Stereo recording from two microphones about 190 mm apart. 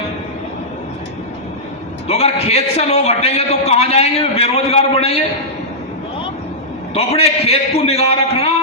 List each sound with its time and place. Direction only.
2.0 s a man's voice: 35° left (ahead or behind)
6.9 s a man's voice: 35° left (ahead or behind)